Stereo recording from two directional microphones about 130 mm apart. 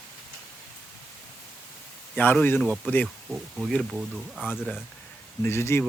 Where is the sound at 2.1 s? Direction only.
10° left (ahead or behind).